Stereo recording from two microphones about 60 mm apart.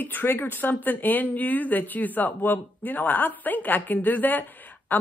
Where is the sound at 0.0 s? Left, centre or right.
Left.